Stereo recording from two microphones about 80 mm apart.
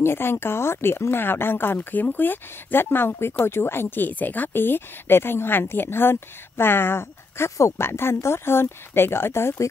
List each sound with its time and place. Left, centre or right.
0.0 s speech: left